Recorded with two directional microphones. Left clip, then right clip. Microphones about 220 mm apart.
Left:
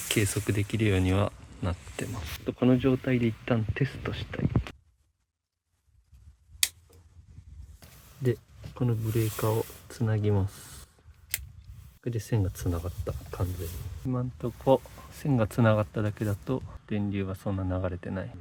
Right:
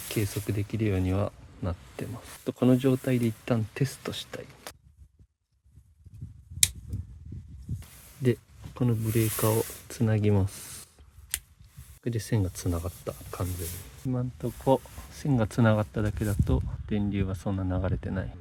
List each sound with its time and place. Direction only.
0.1 s speech: 5° right (ahead or behind)
2.5 s speech: 25° right (ahead or behind)
8.2 s a sound: 25° right (ahead or behind)
9.1 s speech: 25° right (ahead or behind)
12.0 s speech: 20° right (ahead or behind)